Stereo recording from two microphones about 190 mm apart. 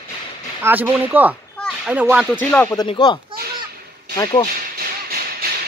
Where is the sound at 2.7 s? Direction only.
20° left (ahead or behind).